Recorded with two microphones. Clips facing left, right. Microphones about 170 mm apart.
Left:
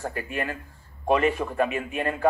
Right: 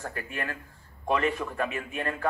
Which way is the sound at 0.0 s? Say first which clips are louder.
Left 5 dB; 15° left (ahead or behind).